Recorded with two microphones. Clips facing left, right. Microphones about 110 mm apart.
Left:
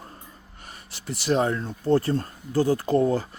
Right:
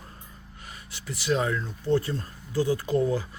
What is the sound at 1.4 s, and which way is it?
Speech, 40° left (ahead or behind).